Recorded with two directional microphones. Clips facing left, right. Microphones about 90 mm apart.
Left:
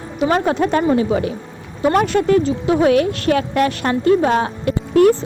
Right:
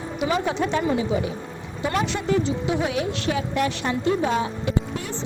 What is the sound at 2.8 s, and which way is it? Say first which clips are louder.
Speech: left 10 dB; 60° left (ahead or behind).